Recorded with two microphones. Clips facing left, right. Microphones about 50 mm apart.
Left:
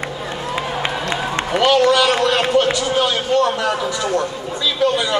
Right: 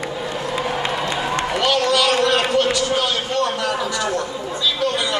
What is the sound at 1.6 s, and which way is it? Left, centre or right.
A man's voice, left.